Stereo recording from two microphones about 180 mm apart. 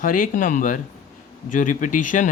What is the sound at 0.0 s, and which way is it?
Speech, 50° left (ahead or behind).